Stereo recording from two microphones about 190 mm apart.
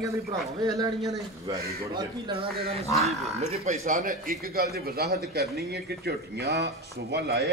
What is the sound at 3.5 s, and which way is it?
A man's voice, 40° right (ahead or behind).